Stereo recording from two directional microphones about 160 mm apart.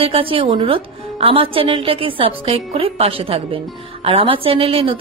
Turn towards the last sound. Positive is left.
turn(degrees=-35)  # may be behind; listen again after turning